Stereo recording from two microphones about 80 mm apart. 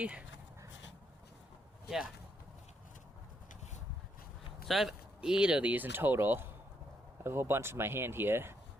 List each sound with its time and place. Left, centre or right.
0.0 s speech: centre
4.7 s speech: centre; by 8.5 s right